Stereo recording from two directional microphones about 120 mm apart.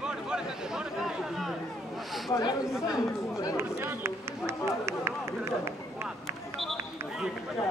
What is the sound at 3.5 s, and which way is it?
Run, 20° right (ahead or behind).